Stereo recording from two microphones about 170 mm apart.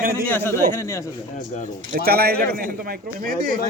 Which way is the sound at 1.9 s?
60° right (ahead or behind).